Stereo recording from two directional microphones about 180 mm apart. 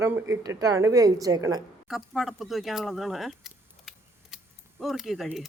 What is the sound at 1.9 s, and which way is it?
Speech, centre (ahead or behind).